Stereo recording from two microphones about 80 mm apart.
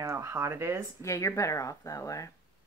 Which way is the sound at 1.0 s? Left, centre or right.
Left.